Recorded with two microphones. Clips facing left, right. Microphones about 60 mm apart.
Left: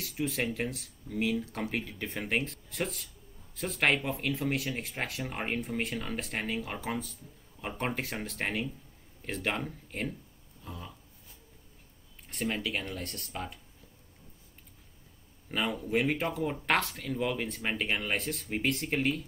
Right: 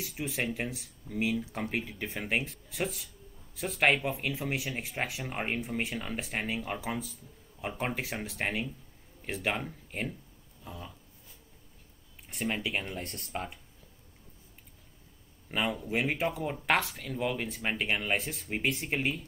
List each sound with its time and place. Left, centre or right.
0.0 s speech: centre
10.6 s a sound: centre
12.3 s speech: centre
12.9 s speech: right
15.5 s speech: centre